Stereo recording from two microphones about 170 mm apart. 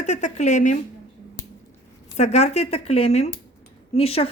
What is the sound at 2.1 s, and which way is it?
Speech, 40° left (ahead or behind).